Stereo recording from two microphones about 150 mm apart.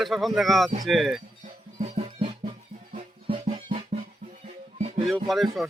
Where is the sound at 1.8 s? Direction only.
40° right (ahead or behind).